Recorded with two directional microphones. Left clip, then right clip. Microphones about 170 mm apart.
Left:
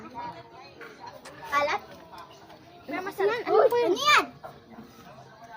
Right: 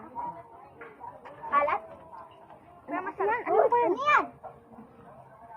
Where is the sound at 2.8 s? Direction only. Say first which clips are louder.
Left 2 dB; 20° left (ahead or behind).